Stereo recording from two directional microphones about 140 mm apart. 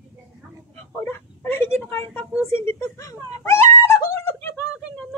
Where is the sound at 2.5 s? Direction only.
20° left (ahead or behind).